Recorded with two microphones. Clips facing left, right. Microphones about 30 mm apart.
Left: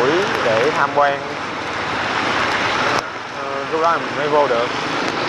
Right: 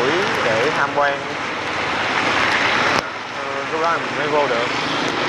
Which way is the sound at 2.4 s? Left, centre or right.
Right.